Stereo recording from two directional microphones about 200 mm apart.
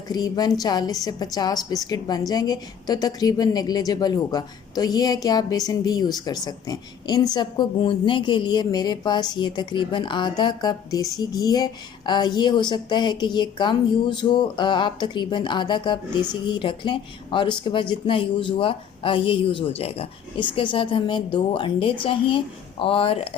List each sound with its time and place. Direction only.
0.1 s a woman's voice: 20° left (ahead or behind)